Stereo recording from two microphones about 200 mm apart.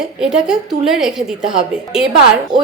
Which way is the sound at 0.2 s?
5° right (ahead or behind).